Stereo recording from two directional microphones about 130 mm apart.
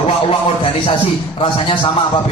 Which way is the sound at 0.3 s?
50° left (ahead or behind).